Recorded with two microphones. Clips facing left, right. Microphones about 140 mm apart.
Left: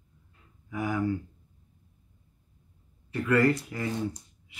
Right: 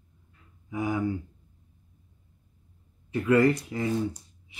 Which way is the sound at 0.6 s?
20° right (ahead or behind).